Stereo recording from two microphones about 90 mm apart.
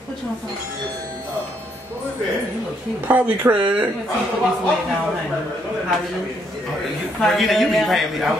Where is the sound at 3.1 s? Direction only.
20° right (ahead or behind).